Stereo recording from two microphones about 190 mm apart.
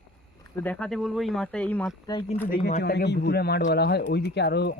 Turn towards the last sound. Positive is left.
turn(degrees=60)  # may be behind; listen again after turning